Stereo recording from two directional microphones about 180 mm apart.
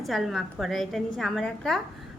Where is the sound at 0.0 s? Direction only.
Centre (ahead or behind).